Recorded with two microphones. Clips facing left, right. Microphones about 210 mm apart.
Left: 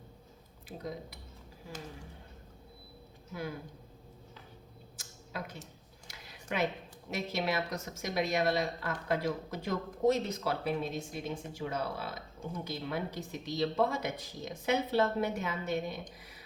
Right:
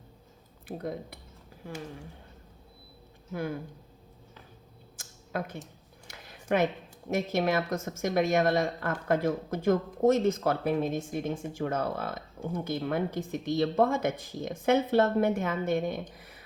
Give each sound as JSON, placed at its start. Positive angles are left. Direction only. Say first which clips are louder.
{"t": 0.8, "sound": "speech", "louder": "right 4 dB", "side_deg": -55}
{"t": 4.9, "sound": "tick-tock", "louder": "right 7 dB", "side_deg": -50}
{"t": 6.1, "sound": "a sound", "louder": "right 10 dB", "side_deg": -55}
{"t": 7.1, "sound": "speech", "louder": "right 7 dB", "side_deg": -50}